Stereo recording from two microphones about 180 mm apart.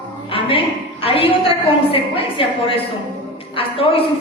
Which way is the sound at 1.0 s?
30° left (ahead or behind).